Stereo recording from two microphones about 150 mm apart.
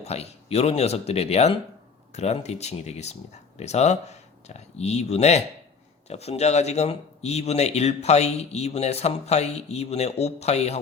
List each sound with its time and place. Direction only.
0.0 s speech: 45° left (ahead or behind)